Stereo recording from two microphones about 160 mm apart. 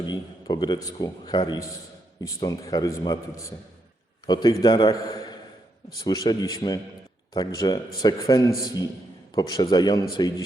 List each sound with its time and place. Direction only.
0.0 s a man's voice: 25° left (ahead or behind)